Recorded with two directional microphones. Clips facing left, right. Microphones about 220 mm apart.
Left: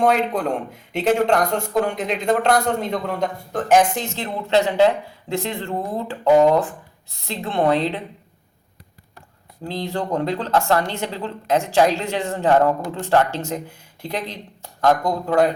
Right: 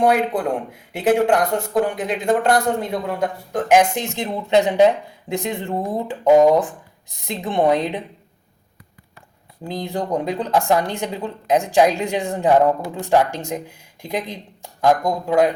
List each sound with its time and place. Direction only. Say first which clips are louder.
0.0 s speech: right 1 dB; 10° right (ahead or behind)
9.6 s speech: right 1 dB; 15° right (ahead or behind)